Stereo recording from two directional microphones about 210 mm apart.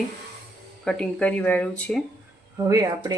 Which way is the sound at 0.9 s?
5° left (ahead or behind).